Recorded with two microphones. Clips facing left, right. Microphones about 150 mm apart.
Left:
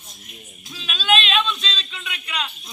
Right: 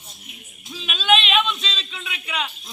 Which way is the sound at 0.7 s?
Centre (ahead or behind).